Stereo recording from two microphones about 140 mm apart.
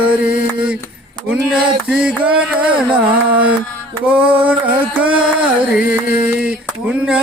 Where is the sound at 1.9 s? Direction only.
5° right (ahead or behind).